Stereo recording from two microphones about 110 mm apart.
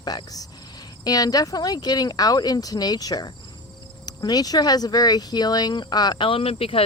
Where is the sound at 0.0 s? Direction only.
35° left (ahead or behind).